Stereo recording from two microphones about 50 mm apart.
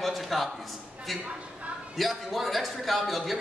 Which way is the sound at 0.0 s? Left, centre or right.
Centre.